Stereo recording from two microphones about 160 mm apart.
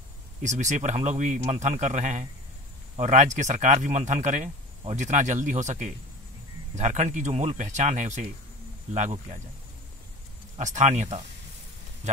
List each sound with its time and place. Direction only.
0.4 s speech: 50° right (ahead or behind)
10.6 s speech: 50° right (ahead or behind)